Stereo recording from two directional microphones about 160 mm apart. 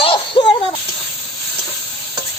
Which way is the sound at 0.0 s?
35° left (ahead or behind).